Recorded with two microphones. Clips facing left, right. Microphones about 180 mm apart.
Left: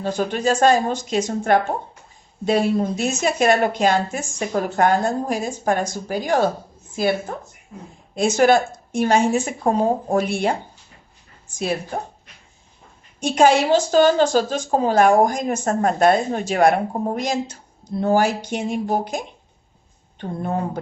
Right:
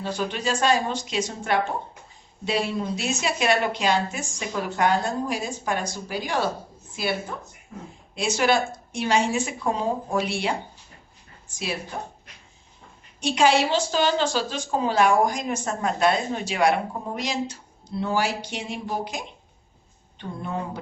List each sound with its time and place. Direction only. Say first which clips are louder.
0.0 s a woman's voice: left 6 dB; 45° left (ahead or behind)
11.6 s a woman's voice: left 7 dB; 45° left (ahead or behind)
13.1 s a woman's voice: left 4 dB; 45° left (ahead or behind)